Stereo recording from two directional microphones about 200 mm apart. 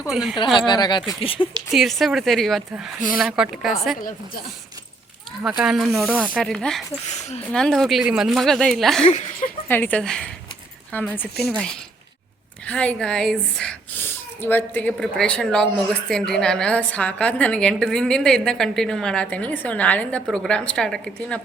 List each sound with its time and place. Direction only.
0.1 s a woman's voice: centre (ahead or behind)
0.7 s speech: 20° left (ahead or behind)
1.7 s a woman's voice: centre (ahead or behind)
5.4 s a woman's voice: 5° right (ahead or behind)
7.0 s speech: 35° left (ahead or behind)
7.5 s a woman's voice: centre (ahead or behind)
9.0 s speech: 35° left (ahead or behind)
9.6 s a woman's voice: 10° left (ahead or behind)